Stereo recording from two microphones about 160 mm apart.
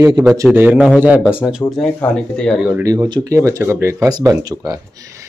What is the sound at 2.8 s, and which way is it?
Speech, 20° right (ahead or behind).